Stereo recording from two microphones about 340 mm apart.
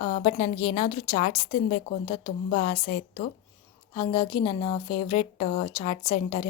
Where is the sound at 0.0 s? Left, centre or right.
Centre.